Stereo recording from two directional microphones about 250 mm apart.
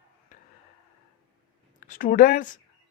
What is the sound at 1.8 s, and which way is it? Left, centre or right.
Speech, left.